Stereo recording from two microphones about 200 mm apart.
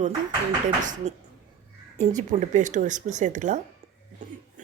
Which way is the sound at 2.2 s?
35° right (ahead or behind).